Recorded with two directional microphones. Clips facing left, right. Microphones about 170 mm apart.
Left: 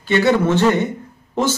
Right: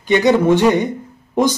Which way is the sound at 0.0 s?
15° right (ahead or behind).